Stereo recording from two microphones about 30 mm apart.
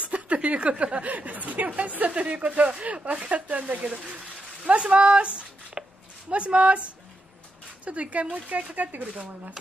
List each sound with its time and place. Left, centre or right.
0.0 s a sound: right
0.6 s speech: right
1.0 s speech: right
3.7 s speech: right